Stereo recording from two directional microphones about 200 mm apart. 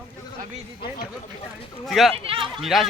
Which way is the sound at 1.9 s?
Centre (ahead or behind).